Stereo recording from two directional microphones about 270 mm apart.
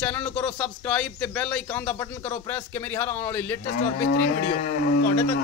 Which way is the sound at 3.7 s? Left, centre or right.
Left.